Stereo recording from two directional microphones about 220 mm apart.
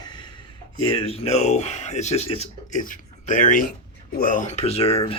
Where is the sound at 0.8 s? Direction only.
25° left (ahead or behind).